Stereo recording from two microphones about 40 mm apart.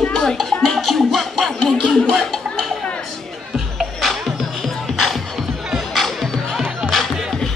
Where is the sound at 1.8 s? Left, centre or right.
Left.